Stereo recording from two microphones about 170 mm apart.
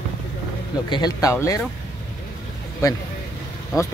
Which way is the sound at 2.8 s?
20° left (ahead or behind).